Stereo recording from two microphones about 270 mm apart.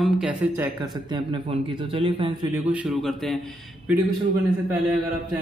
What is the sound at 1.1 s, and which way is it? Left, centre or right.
A man's voice, centre.